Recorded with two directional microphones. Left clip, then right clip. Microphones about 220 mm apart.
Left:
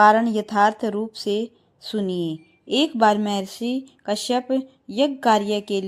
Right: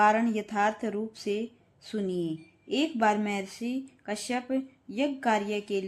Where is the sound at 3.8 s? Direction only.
25° left (ahead or behind).